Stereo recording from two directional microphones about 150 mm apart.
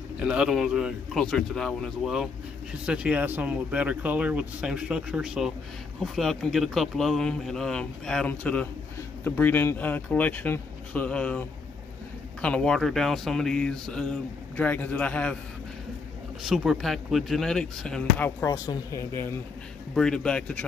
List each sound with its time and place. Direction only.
0.2 s speech: 5° right (ahead or behind); by 15.3 s 10° left (ahead or behind)
16.4 s speech: centre (ahead or behind)
18.4 s speech: 20° left (ahead or behind)
19.9 s speech: 5° left (ahead or behind)